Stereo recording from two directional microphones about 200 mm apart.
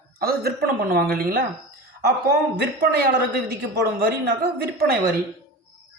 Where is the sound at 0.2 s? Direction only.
50° right (ahead or behind).